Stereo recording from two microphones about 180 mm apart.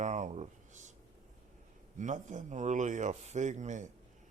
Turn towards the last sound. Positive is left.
turn(degrees=-40)  # may be behind; listen again after turning